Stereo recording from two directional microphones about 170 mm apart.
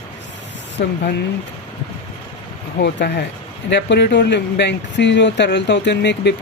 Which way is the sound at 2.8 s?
80° left.